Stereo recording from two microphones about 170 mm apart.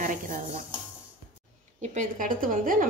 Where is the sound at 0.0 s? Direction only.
50° right (ahead or behind).